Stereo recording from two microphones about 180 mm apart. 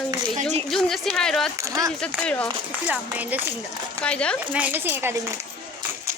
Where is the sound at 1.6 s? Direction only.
20° right (ahead or behind).